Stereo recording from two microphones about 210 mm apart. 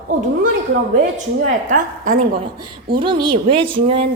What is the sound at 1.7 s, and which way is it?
Speech, 40° right (ahead or behind).